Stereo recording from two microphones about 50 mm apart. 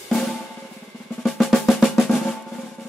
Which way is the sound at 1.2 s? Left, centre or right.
Centre.